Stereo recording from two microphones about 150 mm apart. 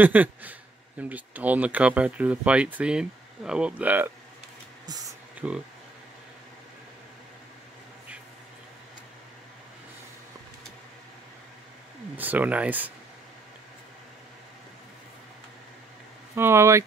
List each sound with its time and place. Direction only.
0.0 s speech: 10° right (ahead or behind)
5.4 s speech: 10° right (ahead or behind)
12.2 s speech: 10° right (ahead or behind)
16.3 s speech: 15° right (ahead or behind)